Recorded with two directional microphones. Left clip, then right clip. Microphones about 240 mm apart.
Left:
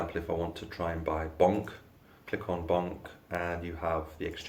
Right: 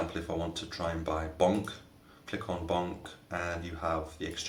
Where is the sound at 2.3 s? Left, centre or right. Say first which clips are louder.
Left 3 dB; left.